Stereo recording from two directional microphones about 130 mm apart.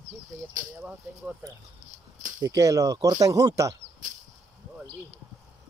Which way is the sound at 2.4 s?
25° right (ahead or behind).